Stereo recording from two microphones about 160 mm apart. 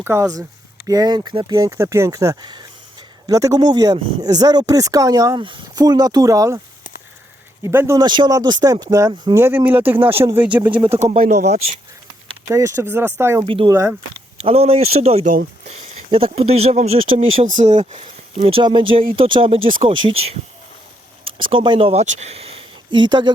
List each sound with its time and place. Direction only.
0.0 s speech: 15° right (ahead or behind)
7.6 s speech: 15° right (ahead or behind)
10.8 s speech: 40° right (ahead or behind)
12.5 s speech: 20° right (ahead or behind)
13.4 s speech: 30° right (ahead or behind)
17.4 s speech: 50° right (ahead or behind)
18.4 s speech: 30° right (ahead or behind)